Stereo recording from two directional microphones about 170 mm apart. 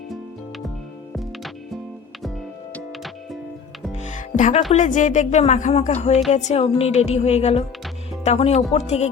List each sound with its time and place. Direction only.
1.1 s music: centre (ahead or behind)
3.9 s music: 45° left (ahead or behind)
4.7 s speech: 45° left (ahead or behind)
6.3 s music: 40° left (ahead or behind)